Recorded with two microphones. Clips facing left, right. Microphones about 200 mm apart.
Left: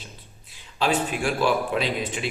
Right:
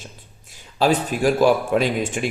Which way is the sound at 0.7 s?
40° right (ahead or behind).